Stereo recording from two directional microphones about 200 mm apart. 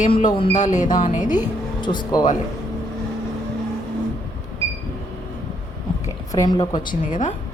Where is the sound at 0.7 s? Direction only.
40° left (ahead or behind).